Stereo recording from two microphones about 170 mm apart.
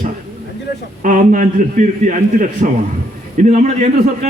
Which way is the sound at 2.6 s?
40° right (ahead or behind).